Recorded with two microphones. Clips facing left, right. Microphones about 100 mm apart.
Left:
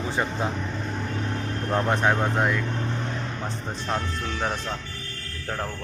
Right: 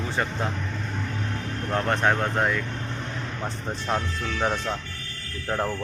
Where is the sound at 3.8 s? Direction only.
Centre (ahead or behind).